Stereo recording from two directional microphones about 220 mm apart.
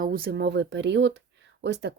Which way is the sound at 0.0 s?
40° right (ahead or behind).